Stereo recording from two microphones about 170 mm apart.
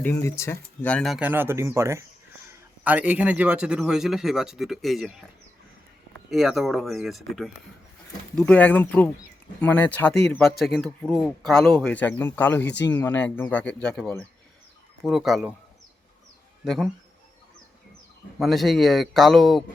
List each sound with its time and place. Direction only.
0.0 s speech: 15° left (ahead or behind); by 5.1 s centre (ahead or behind)
6.3 s speech: centre (ahead or behind)
12.6 s speech: 90° left
12.9 s speech: 10° left (ahead or behind)
16.6 s speech: centre (ahead or behind)
18.3 s speech: centre (ahead or behind)